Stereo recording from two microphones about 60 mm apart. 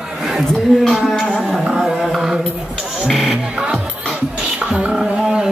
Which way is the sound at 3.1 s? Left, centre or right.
Centre.